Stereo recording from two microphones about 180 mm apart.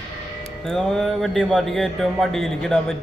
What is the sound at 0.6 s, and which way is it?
A man's voice, 5° left (ahead or behind).